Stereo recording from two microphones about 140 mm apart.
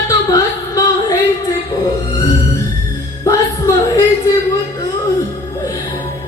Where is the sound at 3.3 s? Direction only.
25° left (ahead or behind).